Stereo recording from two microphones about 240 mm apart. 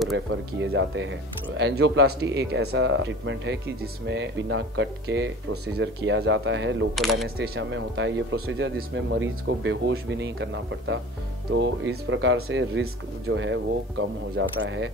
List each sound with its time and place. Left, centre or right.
0.6 s speech: right